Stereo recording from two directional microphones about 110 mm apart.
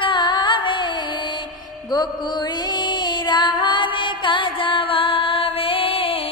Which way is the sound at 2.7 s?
40° left (ahead or behind).